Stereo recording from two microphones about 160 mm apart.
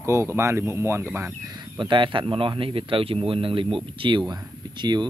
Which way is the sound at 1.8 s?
30° right (ahead or behind).